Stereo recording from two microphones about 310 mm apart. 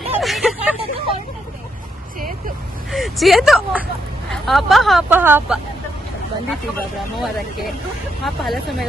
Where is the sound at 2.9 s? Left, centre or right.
Centre.